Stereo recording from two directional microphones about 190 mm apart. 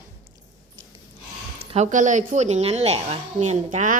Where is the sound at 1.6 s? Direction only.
35° right (ahead or behind).